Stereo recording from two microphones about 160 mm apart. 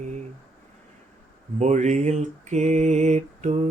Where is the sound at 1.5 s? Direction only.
45° right (ahead or behind).